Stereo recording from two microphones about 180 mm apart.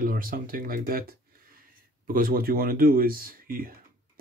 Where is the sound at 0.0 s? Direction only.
50° right (ahead or behind).